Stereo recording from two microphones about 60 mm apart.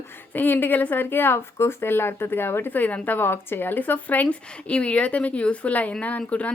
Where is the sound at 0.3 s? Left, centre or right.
Left.